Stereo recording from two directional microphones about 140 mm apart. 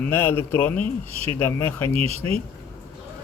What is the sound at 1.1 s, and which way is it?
Speech, 45° right (ahead or behind).